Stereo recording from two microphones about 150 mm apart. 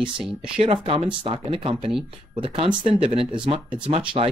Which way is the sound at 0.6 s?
35° right (ahead or behind).